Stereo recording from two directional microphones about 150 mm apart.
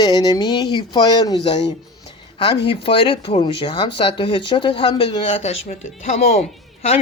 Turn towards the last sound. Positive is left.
turn(degrees=45)  # may be behind; listen again after turning